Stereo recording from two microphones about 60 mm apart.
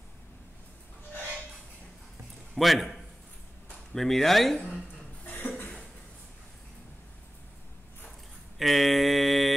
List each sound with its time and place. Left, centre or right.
2.5 s speech: centre
5.2 s cough: left
8.5 s mantra: centre